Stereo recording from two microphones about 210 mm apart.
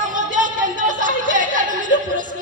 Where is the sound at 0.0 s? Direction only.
40° right (ahead or behind).